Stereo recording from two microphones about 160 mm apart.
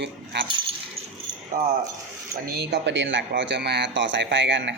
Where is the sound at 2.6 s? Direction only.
90° right.